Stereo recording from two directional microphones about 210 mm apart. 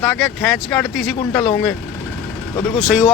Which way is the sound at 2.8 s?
5° right (ahead or behind).